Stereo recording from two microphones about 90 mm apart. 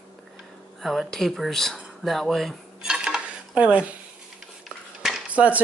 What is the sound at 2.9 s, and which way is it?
Dishes, 10° right (ahead or behind).